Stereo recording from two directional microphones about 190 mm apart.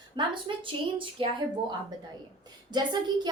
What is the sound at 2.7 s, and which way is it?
Speech, 20° right (ahead or behind).